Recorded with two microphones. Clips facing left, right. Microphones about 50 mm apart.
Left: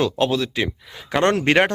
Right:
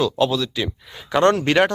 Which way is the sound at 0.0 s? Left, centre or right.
Left.